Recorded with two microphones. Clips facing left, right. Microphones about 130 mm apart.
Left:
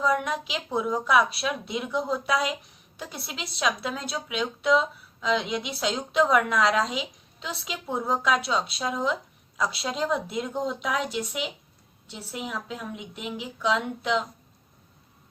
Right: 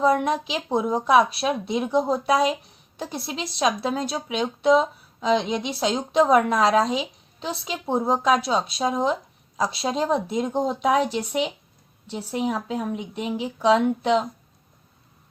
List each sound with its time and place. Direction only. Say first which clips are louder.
0.0 s speech: right 5 dB; 30° right (ahead or behind)